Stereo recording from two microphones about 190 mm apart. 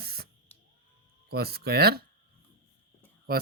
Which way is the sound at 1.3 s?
55° right (ahead or behind).